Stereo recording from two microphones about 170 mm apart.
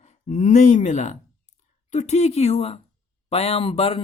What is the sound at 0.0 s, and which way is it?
Speech, 45° left (ahead or behind).